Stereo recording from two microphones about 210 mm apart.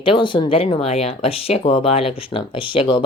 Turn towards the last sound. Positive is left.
turn(degrees=25)  # may be behind; listen again after turning